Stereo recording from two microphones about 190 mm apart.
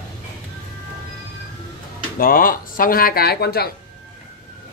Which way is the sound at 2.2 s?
50° left (ahead or behind).